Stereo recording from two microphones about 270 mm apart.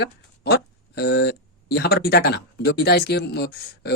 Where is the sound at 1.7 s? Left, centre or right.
Left.